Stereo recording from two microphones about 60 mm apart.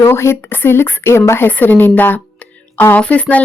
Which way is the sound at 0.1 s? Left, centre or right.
Left.